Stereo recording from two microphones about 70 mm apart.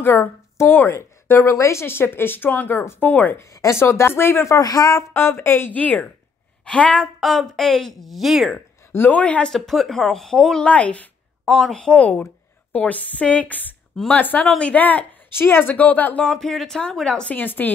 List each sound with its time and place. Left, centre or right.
0.0 s a woman's voice: left
3.7 s speech: left
4.6 s speech: left
5.1 s speech: left
5.8 s a woman's voice: left
7.2 s speech: centre
8.9 s a woman's voice: left
9.5 s a woman's voice: centre
11.4 s a woman's voice: centre
11.7 s a woman's voice: centre
15.3 s a woman's voice: left
16.3 s a woman's voice: centre
17.4 s a woman's voice: left